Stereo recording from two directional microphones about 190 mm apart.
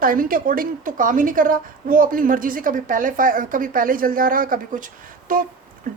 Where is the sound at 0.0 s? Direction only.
50° right (ahead or behind).